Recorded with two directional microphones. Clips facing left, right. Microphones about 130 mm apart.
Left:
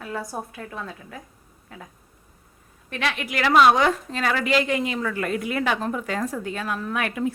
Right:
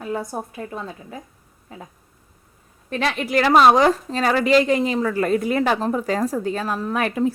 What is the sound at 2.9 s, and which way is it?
A woman's voice, 35° right (ahead or behind).